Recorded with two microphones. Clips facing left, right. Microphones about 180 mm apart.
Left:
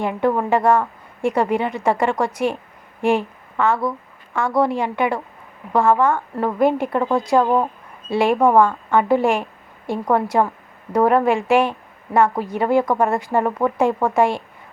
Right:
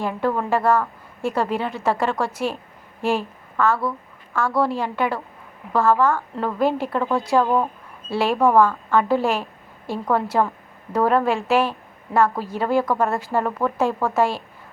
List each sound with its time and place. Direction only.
0.0 s a woman's voice: 20° left (ahead or behind)